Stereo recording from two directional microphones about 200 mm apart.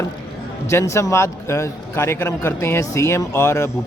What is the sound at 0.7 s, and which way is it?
A man's voice, 15° left (ahead or behind).